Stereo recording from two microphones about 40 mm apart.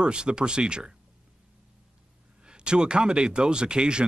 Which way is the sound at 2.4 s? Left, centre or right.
Right.